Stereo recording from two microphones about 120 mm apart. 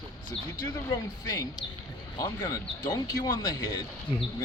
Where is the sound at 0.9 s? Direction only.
35° left (ahead or behind).